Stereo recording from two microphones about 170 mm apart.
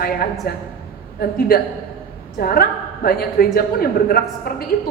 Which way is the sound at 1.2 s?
60° left (ahead or behind).